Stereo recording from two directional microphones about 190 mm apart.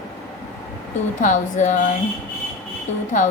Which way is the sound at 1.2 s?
40° left (ahead or behind).